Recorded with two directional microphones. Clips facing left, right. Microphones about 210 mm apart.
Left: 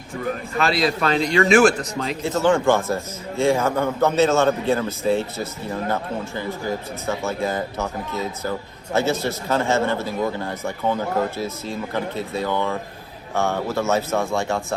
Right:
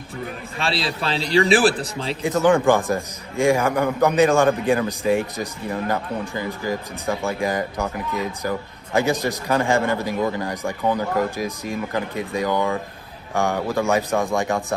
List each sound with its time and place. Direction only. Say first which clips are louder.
0.6 s a man's voice: left 4 dB; 30° right (ahead or behind)
2.2 s speech: right 2 dB; 15° right (ahead or behind)